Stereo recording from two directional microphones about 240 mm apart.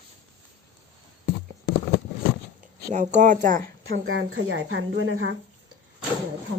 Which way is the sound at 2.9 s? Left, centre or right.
Right.